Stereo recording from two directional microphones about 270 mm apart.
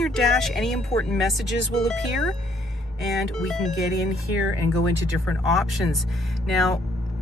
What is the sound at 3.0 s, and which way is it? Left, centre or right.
Speech, centre.